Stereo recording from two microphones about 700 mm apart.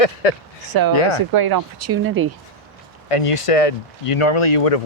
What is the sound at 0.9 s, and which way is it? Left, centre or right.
Speech, left.